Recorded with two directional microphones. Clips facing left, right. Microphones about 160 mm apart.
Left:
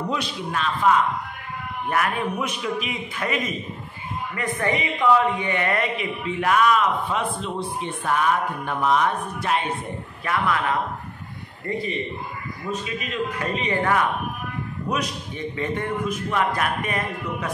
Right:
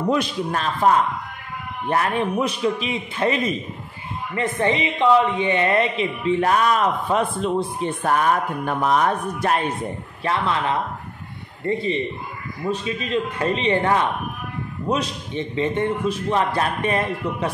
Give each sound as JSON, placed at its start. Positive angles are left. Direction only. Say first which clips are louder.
{"t": 0.1, "sound": "a man's voice", "louder": "right 5 dB", "side_deg": -45}
{"t": 1.9, "sound": "a man's voice", "louder": "right 3 dB", "side_deg": -30}
{"t": 10.2, "sound": "a man's voice", "louder": "right 1 dB", "side_deg": -25}